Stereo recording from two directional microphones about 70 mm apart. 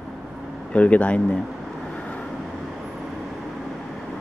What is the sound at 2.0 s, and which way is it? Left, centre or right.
Vehicle, centre.